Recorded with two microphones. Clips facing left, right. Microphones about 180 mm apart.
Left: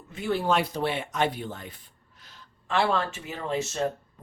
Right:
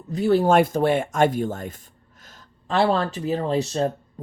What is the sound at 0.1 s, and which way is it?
Speech, 35° right (ahead or behind).